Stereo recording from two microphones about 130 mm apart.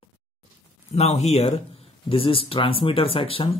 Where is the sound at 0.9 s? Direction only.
60° left (ahead or behind).